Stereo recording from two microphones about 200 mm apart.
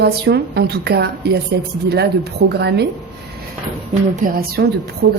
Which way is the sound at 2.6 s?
55° right (ahead or behind).